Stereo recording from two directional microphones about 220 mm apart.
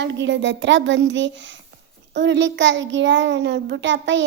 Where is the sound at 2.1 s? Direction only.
55° right (ahead or behind).